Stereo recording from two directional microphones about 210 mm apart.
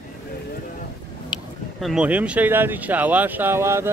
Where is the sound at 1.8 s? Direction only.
Centre (ahead or behind).